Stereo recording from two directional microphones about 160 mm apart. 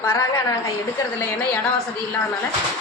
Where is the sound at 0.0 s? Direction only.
15° left (ahead or behind).